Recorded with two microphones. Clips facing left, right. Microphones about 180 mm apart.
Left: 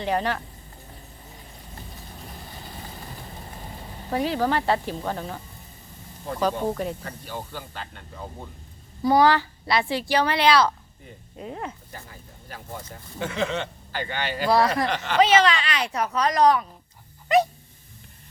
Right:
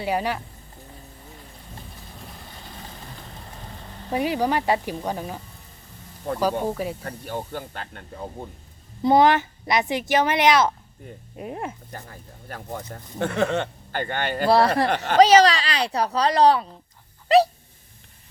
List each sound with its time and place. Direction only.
0.0 s speech: 10° right (ahead or behind)
4.1 s speech: 15° right (ahead or behind)
6.3 s speech: 50° right (ahead or behind)
6.7 s speech: 5° right (ahead or behind)
7.0 s speech: 55° right (ahead or behind)
9.0 s speech: 20° right (ahead or behind)
11.9 s speech: 50° right (ahead or behind); by 16.6 s 30° right (ahead or behind)
17.2 s dog: 35° right (ahead or behind)